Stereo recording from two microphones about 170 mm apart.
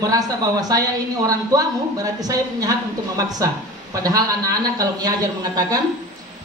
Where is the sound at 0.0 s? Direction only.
20° right (ahead or behind).